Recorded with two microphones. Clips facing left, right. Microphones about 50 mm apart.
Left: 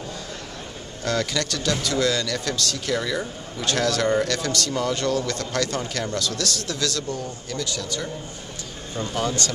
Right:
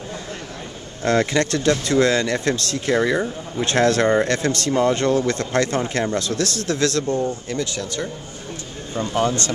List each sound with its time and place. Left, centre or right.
1.0 s speech: right